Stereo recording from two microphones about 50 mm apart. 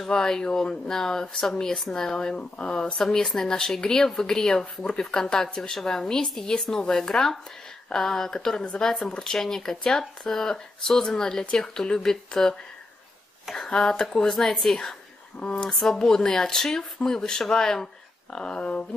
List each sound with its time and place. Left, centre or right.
0.0 s speech: centre
13.7 s speech: centre
15.3 s speech: centre
15.7 s speech: centre